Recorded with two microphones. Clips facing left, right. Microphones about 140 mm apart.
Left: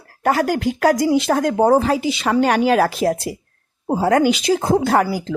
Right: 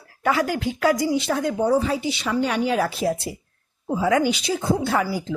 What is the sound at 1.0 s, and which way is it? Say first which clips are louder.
Speech: left 6 dB; 90° left.